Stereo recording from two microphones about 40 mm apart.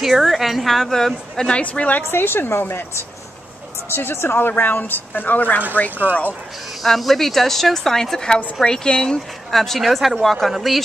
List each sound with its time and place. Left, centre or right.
0.0 s a woman's voice: centre
1.5 s a woman's voice: left
2.0 s a woman's voice: left
6.8 s a woman's voice: centre; by 9.2 s left
9.5 s a woman's voice: centre